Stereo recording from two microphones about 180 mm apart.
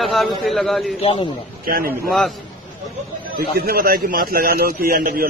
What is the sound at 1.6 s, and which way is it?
Speech, 55° right (ahead or behind).